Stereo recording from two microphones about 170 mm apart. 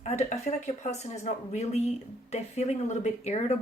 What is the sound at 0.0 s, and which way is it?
Speech, 40° left (ahead or behind).